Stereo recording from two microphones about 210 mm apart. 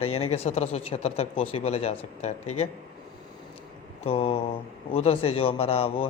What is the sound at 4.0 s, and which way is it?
Speech, 30° left (ahead or behind).